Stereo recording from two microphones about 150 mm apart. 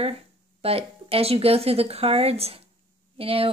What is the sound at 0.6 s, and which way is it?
Speech, 40° right (ahead or behind).